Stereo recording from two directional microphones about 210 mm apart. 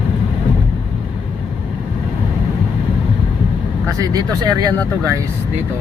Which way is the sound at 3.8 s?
15° right (ahead or behind).